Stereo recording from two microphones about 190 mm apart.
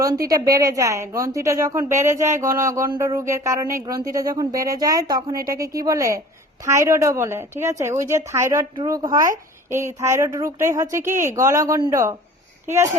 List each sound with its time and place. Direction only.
0.0 s a woman's voice: 20° right (ahead or behind)